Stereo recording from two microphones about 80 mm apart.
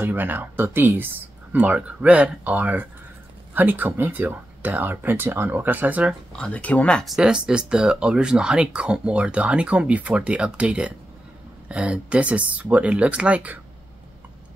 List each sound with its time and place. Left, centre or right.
0.0 s speech: right
1.6 s speech: centre
6.3 s speech: centre
7.1 s speech: centre